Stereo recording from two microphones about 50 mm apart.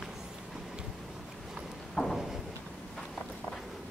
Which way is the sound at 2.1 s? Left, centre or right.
Centre.